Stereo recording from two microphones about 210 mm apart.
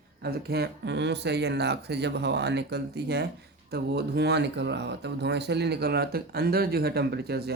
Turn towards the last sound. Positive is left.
turn(degrees=-50)  # may be behind; listen again after turning